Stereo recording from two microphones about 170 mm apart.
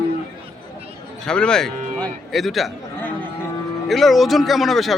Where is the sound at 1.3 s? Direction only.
5° left (ahead or behind).